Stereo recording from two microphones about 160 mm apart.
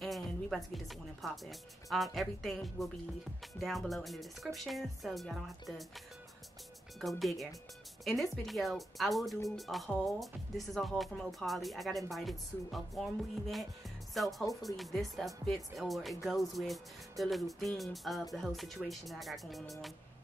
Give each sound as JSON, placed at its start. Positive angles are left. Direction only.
{"t": 0.0, "sound": "speech", "side_deg": 0}
{"t": 7.0, "sound": "speech", "side_deg": 0}
{"t": 14.5, "sound": "speech", "side_deg": 20}
{"t": 14.8, "sound": "speech", "side_deg": 0}